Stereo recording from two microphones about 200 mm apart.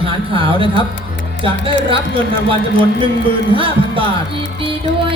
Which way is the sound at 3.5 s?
25° right (ahead or behind).